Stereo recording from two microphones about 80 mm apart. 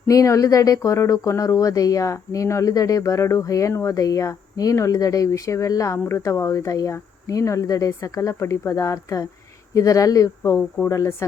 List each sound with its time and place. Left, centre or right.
0.1 s speech: left